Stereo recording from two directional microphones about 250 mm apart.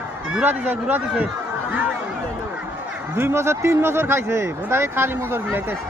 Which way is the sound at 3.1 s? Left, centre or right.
Centre.